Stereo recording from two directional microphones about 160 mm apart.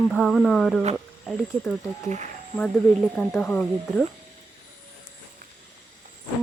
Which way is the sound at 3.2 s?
10° left (ahead or behind).